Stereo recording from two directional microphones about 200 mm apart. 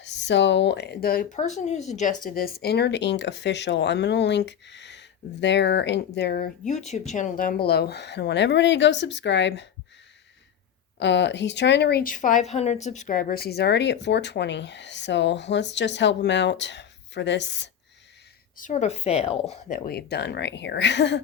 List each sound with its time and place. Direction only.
0.0 s speech: 60° left (ahead or behind)
11.0 s speech: 60° left (ahead or behind)
18.5 s speech: 40° left (ahead or behind); by 21.2 s 60° left (ahead or behind)